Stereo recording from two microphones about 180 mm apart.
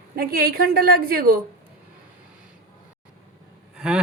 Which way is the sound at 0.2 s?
55° right (ahead or behind).